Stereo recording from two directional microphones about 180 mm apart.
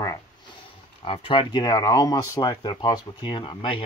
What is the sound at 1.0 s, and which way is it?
Speech, 30° left (ahead or behind).